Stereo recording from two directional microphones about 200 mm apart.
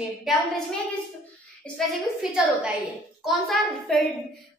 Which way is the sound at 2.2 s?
5° right (ahead or behind).